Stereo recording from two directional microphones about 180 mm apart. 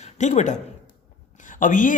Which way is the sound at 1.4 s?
45° left (ahead or behind).